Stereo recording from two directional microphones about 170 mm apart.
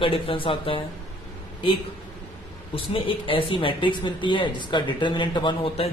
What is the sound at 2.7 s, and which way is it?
Speech, 30° left (ahead or behind).